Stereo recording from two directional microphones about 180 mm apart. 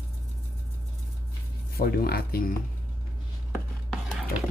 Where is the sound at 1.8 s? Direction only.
55° left (ahead or behind).